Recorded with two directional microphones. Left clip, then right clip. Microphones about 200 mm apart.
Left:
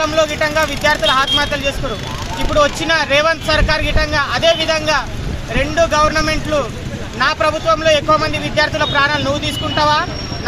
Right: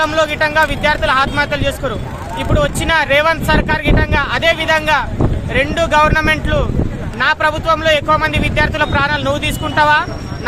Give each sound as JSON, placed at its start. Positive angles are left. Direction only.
{"t": 0.0, "sound": "speech", "side_deg": -30}
{"t": 2.6, "sound": "speech", "side_deg": -35}
{"t": 7.2, "sound": "speech", "side_deg": -30}